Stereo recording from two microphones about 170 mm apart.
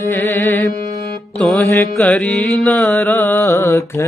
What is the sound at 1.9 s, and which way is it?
Carnatic music, 5° left (ahead or behind).